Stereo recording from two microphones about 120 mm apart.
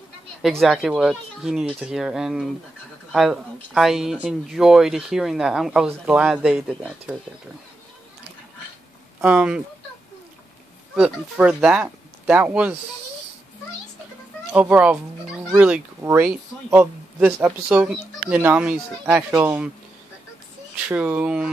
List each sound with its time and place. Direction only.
0.4 s speech: centre (ahead or behind)
6.7 s speech: 5° left (ahead or behind)
9.2 s speech: 10° right (ahead or behind)
11.0 s speech: 10° right (ahead or behind)
14.5 s speech: 10° right (ahead or behind)
20.9 s speech: 10° right (ahead or behind)